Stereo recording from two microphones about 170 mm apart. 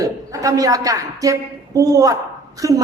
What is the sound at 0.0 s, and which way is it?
A woman's voice, 20° right (ahead or behind).